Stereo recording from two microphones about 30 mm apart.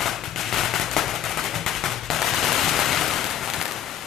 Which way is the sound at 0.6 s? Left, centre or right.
Centre.